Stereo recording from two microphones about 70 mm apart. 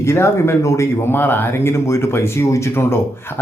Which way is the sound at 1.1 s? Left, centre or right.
Left.